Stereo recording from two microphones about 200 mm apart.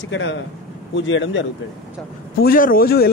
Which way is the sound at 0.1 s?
70° left (ahead or behind).